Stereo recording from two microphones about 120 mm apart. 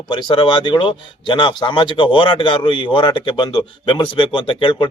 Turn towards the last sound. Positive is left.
turn(degrees=45)  # may be behind; listen again after turning